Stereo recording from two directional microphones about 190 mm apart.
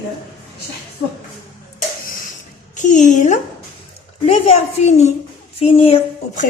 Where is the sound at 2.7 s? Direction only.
40° left (ahead or behind).